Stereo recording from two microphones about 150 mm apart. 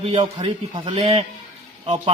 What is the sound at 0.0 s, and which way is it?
A man's voice, 35° right (ahead or behind).